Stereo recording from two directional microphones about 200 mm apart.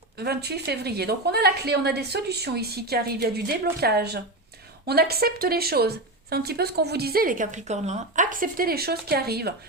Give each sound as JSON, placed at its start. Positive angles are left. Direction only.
{"t": 0.2, "sound": "a woman's voice", "side_deg": -55}